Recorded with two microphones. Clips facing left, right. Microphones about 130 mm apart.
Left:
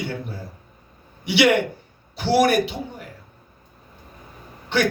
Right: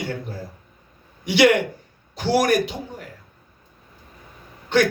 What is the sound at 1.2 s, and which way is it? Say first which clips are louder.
Speech: right 1 dB; 45° right (ahead or behind).